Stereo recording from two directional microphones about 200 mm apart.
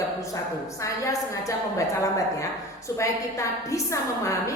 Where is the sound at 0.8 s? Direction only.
15° left (ahead or behind).